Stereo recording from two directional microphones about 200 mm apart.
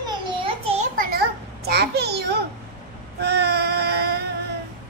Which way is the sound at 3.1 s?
55° right (ahead or behind).